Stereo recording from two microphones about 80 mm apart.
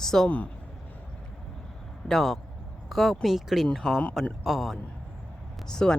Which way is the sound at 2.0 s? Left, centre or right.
Centre.